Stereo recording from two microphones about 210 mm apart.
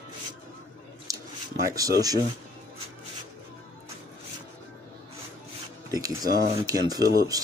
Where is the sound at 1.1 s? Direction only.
15° right (ahead or behind).